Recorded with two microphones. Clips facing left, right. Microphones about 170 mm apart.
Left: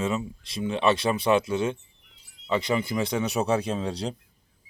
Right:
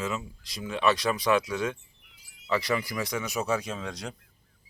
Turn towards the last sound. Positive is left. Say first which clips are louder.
# left 7 dB
turn(degrees=30)  # may be behind; listen again after turning